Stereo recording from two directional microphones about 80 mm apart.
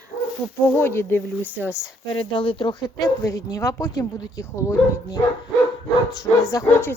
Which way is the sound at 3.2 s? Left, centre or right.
Left.